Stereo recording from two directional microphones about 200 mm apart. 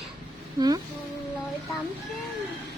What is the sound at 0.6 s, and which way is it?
Speech, 20° right (ahead or behind).